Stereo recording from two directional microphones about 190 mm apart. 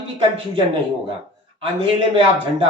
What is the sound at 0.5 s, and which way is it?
Speech, 25° right (ahead or behind).